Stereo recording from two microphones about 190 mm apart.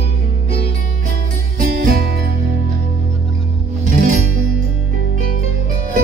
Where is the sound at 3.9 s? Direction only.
45° right (ahead or behind).